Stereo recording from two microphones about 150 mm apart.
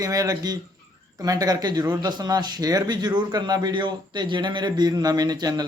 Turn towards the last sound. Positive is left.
turn(degrees=-25)  # may be behind; listen again after turning